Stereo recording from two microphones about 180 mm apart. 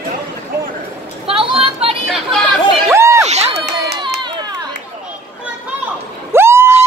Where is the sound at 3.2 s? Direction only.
35° right (ahead or behind).